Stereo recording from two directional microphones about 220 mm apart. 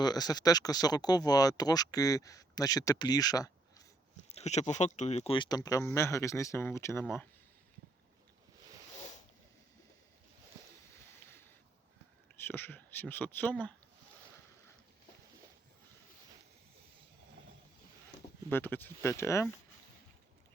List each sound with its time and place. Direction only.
0.0 s speech: 20° left (ahead or behind)
4.3 s speech: 30° left (ahead or behind); by 7.0 s 10° left (ahead or behind)
12.4 s speech: 10° left (ahead or behind)
18.4 s speech: 10° left (ahead or behind)